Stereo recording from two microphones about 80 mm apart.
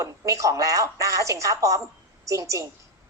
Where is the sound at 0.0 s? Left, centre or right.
Right.